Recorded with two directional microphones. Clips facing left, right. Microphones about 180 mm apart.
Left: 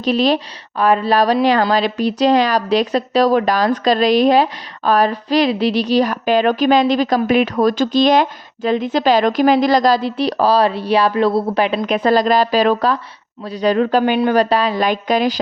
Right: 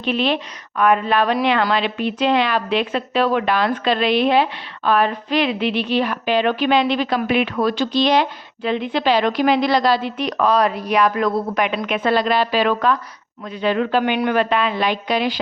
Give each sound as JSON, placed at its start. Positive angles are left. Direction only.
{"t": 0.0, "sound": "speech", "side_deg": 40}